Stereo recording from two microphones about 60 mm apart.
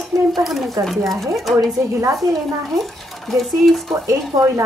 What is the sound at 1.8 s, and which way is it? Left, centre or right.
Speech, right.